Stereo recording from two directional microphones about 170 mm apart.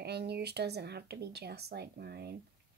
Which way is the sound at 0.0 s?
75° right (ahead or behind).